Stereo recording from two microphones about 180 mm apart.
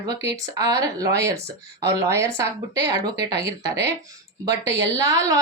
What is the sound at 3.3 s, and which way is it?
Speech, 65° right (ahead or behind).